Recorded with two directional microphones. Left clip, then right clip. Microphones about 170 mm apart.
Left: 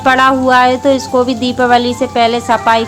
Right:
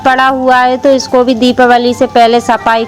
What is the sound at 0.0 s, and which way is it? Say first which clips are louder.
A woman's voice: right 1 dB; 30° right (ahead or behind).